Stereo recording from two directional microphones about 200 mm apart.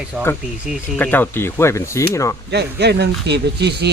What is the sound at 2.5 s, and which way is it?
Speech, 55° right (ahead or behind).